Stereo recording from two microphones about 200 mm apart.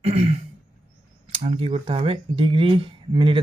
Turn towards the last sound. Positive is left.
turn(degrees=-25)  # may be behind; listen again after turning